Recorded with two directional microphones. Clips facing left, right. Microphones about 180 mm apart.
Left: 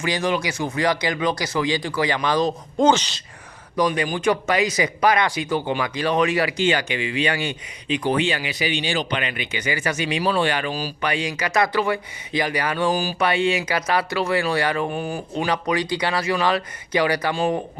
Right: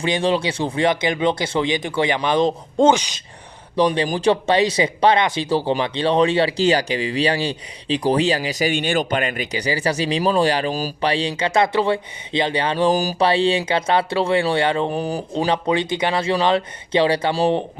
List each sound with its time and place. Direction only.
0.0 s speech: 30° right (ahead or behind)
2.9 s speech: 10° right (ahead or behind)
3.8 s speech: 30° right (ahead or behind)
11.0 s speech: 30° right (ahead or behind)
12.9 s speech: 40° right (ahead or behind)
15.4 s speech: 25° right (ahead or behind)